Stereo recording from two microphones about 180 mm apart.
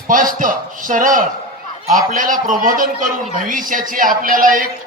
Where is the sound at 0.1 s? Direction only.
50° right (ahead or behind).